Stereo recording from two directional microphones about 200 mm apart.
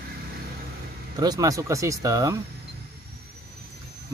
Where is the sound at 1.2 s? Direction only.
20° right (ahead or behind).